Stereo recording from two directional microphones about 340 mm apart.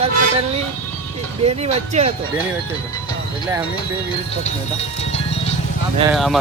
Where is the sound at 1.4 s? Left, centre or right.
Centre.